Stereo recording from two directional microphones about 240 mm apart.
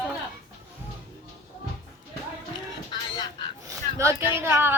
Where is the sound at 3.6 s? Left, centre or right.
Centre.